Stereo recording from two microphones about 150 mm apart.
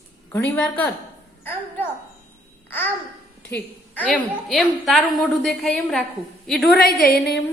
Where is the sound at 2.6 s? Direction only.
10° left (ahead or behind).